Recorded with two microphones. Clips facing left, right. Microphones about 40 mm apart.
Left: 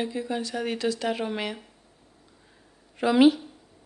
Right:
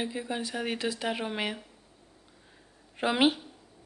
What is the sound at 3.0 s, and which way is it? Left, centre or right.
Speech, right.